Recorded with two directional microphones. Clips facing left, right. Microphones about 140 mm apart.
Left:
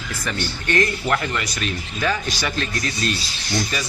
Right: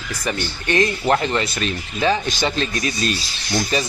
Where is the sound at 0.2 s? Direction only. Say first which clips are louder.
Right 2 dB; 20° right (ahead or behind).